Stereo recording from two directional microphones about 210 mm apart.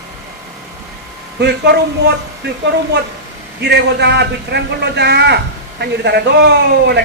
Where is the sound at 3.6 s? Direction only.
55° right (ahead or behind).